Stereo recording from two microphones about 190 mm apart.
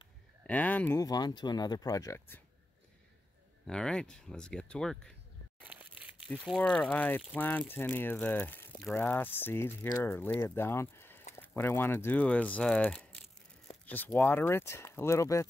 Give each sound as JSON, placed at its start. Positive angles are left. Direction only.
{"t": 0.5, "sound": "speech", "side_deg": 10}
{"t": 3.6, "sound": "speech", "side_deg": 5}
{"t": 5.6, "sound": "speech", "side_deg": -10}